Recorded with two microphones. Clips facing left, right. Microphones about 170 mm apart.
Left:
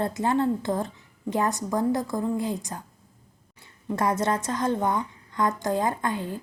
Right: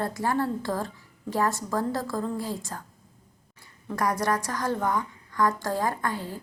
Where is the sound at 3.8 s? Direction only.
25° left (ahead or behind).